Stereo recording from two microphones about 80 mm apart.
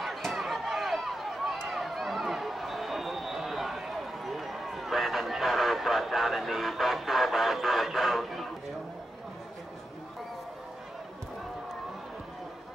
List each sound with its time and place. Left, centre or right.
0.0 s chop: centre